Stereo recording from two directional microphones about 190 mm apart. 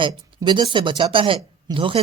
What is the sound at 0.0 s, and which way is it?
Speech, 20° right (ahead or behind).